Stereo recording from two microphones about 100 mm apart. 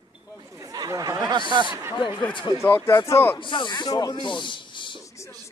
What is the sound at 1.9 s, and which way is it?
Speech, 50° left (ahead or behind).